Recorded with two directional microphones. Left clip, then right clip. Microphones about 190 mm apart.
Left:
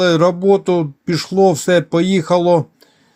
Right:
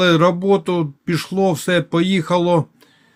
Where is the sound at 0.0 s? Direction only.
5° left (ahead or behind).